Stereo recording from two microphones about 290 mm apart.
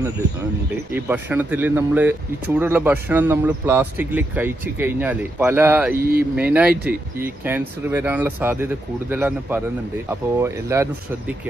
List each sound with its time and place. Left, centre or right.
0.9 s speech: centre
5.9 s speech: right
6.3 s speech: centre